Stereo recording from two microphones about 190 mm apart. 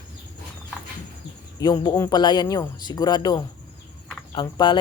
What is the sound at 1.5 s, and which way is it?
Speech, 20° left (ahead or behind).